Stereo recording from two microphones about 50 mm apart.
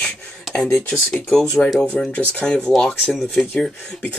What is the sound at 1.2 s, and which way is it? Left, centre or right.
Speech, centre.